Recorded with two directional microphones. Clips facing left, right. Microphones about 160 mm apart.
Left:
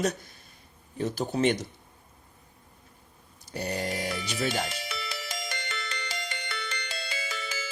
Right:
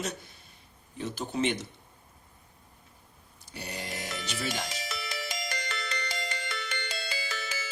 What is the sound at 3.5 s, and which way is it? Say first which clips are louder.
Grunt: left 8 dB; 45° left (ahead or behind).